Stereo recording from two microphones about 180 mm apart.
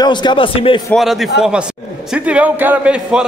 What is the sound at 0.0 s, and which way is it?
Speech, 25° left (ahead or behind).